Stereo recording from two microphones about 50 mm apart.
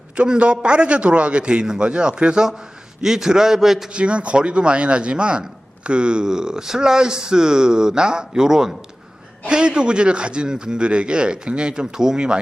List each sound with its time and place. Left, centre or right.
0.2 s a man's voice: right; by 3.8 s centre
3.9 s a man's voice: right